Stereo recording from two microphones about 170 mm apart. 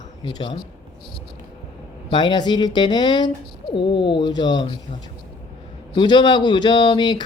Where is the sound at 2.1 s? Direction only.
25° left (ahead or behind).